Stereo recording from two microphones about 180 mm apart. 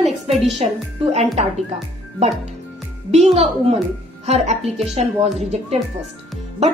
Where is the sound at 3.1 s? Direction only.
40° right (ahead or behind).